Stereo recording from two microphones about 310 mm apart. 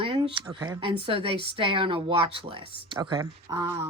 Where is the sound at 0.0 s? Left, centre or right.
Centre.